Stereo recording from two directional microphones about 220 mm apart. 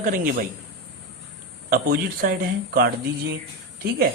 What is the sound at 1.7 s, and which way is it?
A man's voice, 40° right (ahead or behind).